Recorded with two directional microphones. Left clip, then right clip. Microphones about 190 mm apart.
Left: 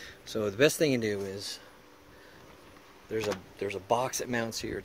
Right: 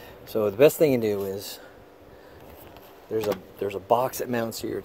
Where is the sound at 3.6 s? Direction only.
5° right (ahead or behind).